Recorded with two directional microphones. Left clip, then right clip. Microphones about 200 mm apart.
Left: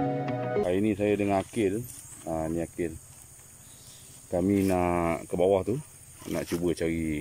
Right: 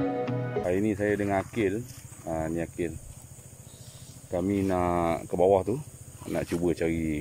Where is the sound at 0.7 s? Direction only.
Centre (ahead or behind).